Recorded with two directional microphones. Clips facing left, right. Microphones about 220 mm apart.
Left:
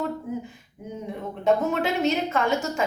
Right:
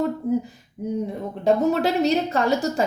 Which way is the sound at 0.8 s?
35° right (ahead or behind).